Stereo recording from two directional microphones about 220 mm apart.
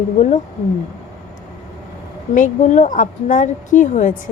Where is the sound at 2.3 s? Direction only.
35° left (ahead or behind).